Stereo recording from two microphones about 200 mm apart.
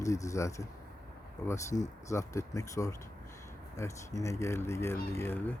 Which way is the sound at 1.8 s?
15° left (ahead or behind).